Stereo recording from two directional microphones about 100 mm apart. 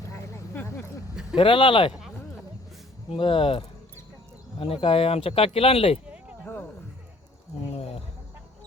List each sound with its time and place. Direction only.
0.1 s vehicle: 25° left (ahead or behind)
1.4 s speech: 55° left (ahead or behind)
3.1 s speech: 60° left (ahead or behind)
7.7 s a sound: 80° left